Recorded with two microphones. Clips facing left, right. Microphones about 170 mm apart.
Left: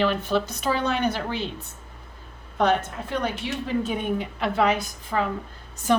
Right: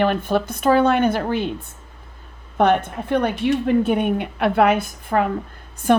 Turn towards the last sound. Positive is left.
turn(degrees=-55)  # may be behind; listen again after turning